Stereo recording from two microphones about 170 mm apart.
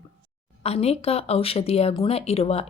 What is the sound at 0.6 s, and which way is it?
Speech, 35° left (ahead or behind).